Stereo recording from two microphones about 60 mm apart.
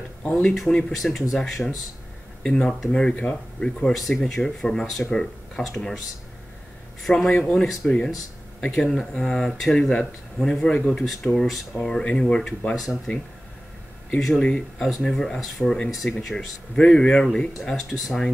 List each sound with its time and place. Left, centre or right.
0.2 s speech: centre
1.6 s speech: centre
3.8 s speech: centre
7.0 s speech: centre
7.3 s speech: centre
11.3 s speech: centre
11.7 s speech: centre